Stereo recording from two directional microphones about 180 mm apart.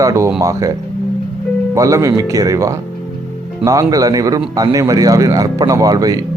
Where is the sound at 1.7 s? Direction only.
20° right (ahead or behind).